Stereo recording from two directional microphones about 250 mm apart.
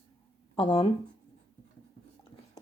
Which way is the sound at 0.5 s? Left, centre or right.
Left.